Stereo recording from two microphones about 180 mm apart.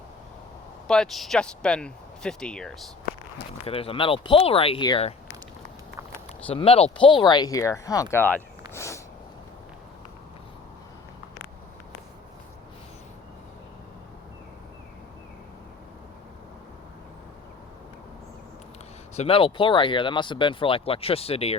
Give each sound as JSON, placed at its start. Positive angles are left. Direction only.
{"t": 0.9, "sound": "speech", "side_deg": 5}
{"t": 3.7, "sound": "speech", "side_deg": 30}
{"t": 6.5, "sound": "speech", "side_deg": 30}
{"t": 19.1, "sound": "speech", "side_deg": 35}